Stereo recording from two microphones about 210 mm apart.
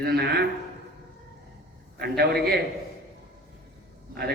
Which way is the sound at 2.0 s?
50° right (ahead or behind).